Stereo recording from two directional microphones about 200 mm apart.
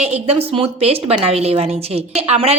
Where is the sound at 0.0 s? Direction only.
30° right (ahead or behind).